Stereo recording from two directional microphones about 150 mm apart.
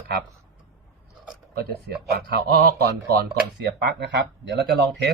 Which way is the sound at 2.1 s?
90° right.